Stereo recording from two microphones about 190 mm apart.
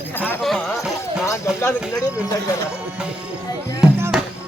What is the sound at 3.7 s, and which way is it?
Music, 10° right (ahead or behind).